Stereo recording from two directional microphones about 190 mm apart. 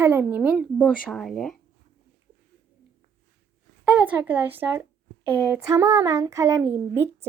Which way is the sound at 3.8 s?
10° right (ahead or behind).